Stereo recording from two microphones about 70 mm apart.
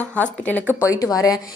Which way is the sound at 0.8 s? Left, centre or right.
Left.